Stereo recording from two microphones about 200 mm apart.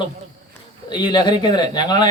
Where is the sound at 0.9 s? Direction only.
20° left (ahead or behind).